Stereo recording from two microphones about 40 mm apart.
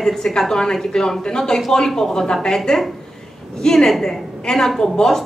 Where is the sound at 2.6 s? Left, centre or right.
Centre.